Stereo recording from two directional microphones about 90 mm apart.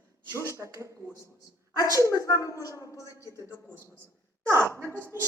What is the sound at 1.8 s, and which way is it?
Speech, 35° left (ahead or behind).